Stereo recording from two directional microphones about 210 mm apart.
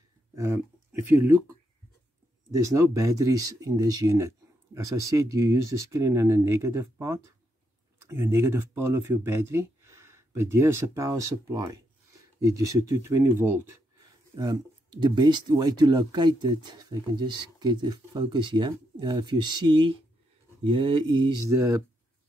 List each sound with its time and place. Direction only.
0.3 s a sound: 15° right (ahead or behind)
1.0 s speech: 10° right (ahead or behind)
2.5 s speech: 15° right (ahead or behind)